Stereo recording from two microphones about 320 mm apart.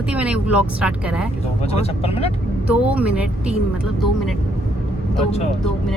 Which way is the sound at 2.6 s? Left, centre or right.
Centre.